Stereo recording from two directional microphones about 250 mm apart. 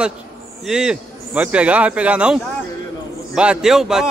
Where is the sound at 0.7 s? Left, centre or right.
Centre.